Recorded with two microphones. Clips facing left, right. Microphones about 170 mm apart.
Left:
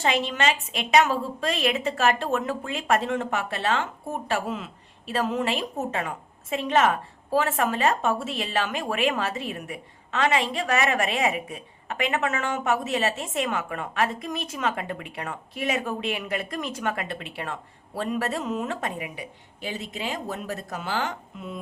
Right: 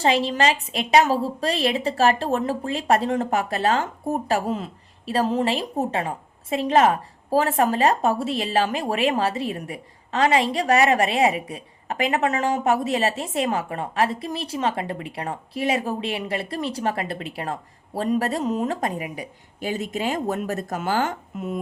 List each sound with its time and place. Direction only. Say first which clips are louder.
0.0 s a woman's voice: right 4 dB; 35° right (ahead or behind)